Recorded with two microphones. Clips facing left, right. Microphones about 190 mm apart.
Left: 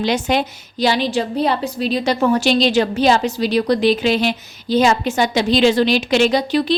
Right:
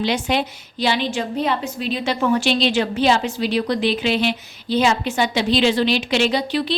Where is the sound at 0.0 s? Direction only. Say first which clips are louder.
Left 3 dB; 45° left (ahead or behind).